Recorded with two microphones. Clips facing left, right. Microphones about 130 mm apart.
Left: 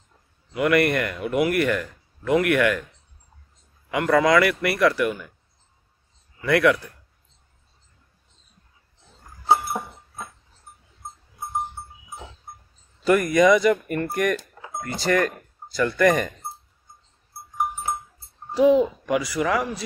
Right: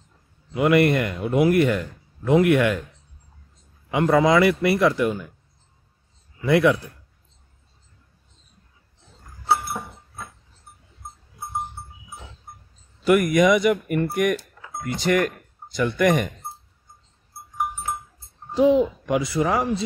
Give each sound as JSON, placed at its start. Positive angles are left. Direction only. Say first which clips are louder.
{"t": 0.6, "sound": "speech", "louder": "right 2 dB", "side_deg": -25}
{"t": 3.9, "sound": "speech", "louder": "right 1 dB", "side_deg": -25}
{"t": 6.4, "sound": "speech", "louder": "right 1 dB", "side_deg": -25}
{"t": 9.5, "sound": "a sound", "louder": "left 2 dB", "side_deg": 15}
{"t": 13.0, "sound": "speech", "louder": "even", "side_deg": -15}
{"t": 18.5, "sound": "a child's voice", "louder": "even", "side_deg": -20}